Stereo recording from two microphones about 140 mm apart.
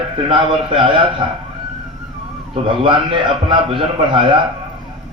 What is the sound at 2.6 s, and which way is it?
Speech, 40° right (ahead or behind).